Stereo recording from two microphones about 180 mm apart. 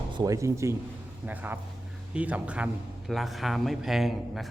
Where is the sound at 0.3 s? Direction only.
15° right (ahead or behind).